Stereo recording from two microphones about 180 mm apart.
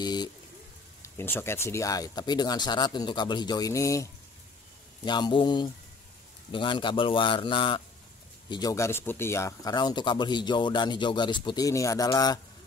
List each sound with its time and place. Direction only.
0.0 s vehicle: 25° left (ahead or behind)
1.0 s speech: 15° left (ahead or behind)